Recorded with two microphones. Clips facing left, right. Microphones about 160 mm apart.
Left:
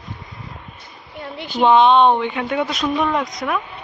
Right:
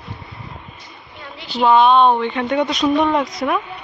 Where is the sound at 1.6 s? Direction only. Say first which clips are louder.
Even; 20° left (ahead or behind); by 3.6 s centre (ahead or behind).